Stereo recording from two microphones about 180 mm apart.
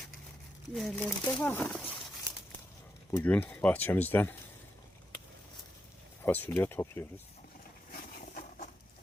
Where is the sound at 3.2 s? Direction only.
10° left (ahead or behind).